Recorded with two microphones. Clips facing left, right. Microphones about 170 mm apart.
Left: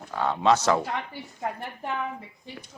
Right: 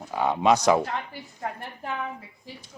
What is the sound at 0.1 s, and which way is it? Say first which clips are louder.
Speech: right 1 dB; 15° right (ahead or behind).